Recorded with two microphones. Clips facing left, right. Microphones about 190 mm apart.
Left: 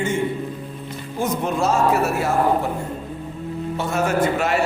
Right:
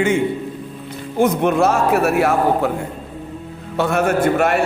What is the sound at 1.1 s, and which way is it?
A man's voice, 60° right (ahead or behind).